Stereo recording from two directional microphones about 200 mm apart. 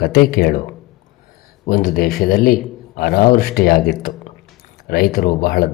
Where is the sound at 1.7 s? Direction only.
45° left (ahead or behind).